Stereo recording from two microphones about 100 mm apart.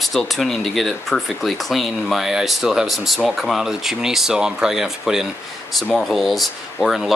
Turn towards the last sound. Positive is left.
turn(degrees=0)  # may be behind; listen again after turning